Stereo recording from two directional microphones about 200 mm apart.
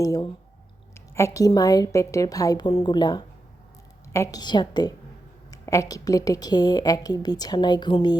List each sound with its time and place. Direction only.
0.0 s a woman's voice: 15° left (ahead or behind)